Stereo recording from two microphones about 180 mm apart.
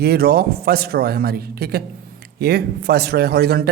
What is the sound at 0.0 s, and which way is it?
A man's voice, 60° right (ahead or behind).